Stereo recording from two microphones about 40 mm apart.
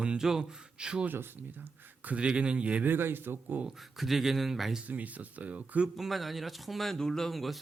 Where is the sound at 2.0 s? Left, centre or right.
Right.